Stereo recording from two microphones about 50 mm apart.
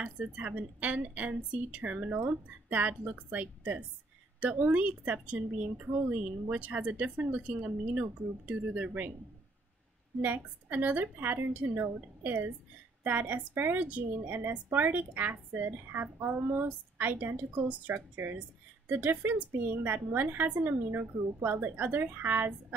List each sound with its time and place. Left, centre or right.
0.0 s a woman's voice: right
10.2 s a woman's voice: right
18.1 s a woman's voice: right